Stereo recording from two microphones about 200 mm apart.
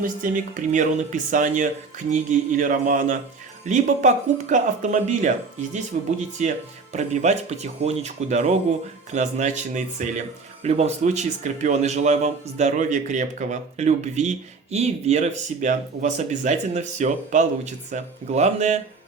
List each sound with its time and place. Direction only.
0.0 s speech: 40° right (ahead or behind)